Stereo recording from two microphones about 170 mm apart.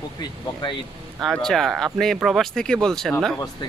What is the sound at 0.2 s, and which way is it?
Speech, 25° left (ahead or behind).